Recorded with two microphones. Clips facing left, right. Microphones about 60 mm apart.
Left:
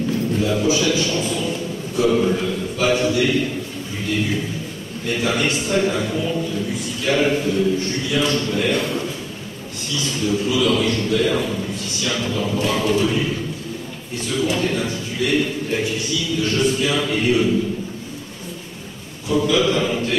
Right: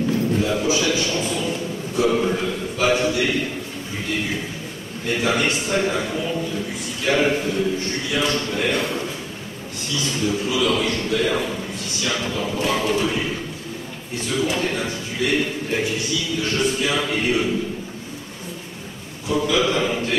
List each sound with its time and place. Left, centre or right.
0.4 s a man's voice: right
19.2 s a man's voice: right